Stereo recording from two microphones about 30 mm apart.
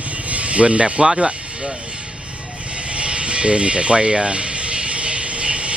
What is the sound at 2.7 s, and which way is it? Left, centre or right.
Music, right.